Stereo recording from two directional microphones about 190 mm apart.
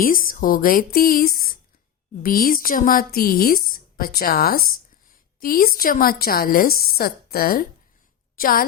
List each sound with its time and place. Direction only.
0.0 s a woman's voice: 45° left (ahead or behind)